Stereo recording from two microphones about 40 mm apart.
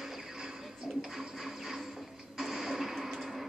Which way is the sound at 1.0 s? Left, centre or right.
Centre.